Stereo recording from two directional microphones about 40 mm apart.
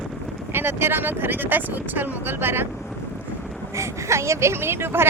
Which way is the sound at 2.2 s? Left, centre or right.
Right.